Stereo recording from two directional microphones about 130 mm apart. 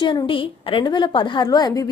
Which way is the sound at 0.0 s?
35° left (ahead or behind).